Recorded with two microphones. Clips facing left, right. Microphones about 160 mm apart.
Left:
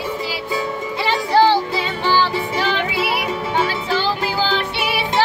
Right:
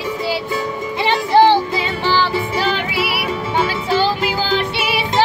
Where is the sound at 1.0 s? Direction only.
20° right (ahead or behind).